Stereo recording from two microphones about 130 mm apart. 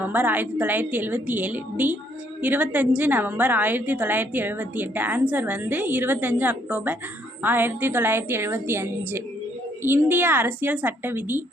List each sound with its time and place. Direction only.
0.0 s a woman's voice: 15° right (ahead or behind)